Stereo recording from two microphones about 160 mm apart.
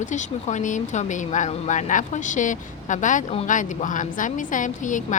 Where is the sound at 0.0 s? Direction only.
50° left (ahead or behind).